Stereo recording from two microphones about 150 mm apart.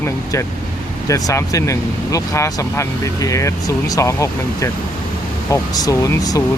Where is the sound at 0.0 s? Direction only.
20° left (ahead or behind).